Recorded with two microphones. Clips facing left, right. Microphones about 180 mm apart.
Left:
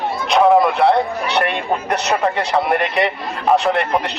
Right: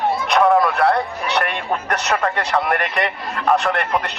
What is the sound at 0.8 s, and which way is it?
Speech, centre (ahead or behind).